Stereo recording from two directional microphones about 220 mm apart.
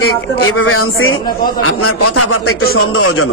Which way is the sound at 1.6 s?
85° left.